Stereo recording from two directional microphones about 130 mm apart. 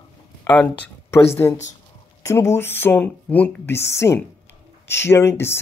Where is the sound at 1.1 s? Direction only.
20° left (ahead or behind).